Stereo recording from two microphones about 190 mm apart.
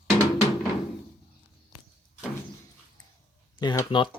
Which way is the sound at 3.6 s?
20° left (ahead or behind).